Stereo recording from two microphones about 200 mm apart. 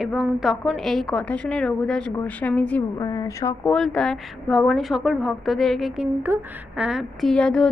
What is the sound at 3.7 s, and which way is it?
A woman's voice, 5° left (ahead or behind).